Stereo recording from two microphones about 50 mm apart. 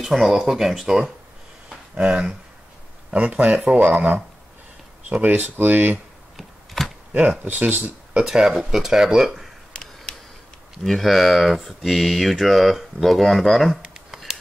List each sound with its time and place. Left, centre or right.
0.0 s speech: centre
2.0 s speech: right
5.2 s speech: right
6.3 s a sound: centre
7.2 s speech: right
8.2 s speech: centre
9.7 s a sound: centre
10.8 s speech: centre